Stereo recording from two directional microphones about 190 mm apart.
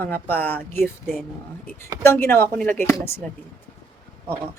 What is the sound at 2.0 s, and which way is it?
Speech, 15° left (ahead or behind).